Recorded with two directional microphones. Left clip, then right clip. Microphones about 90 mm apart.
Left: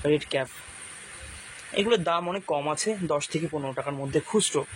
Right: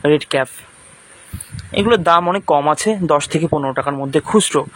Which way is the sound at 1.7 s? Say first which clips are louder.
Right 11 dB; 80° right.